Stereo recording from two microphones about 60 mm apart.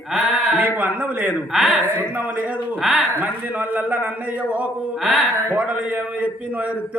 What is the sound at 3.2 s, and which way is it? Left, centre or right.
A man's voice, right.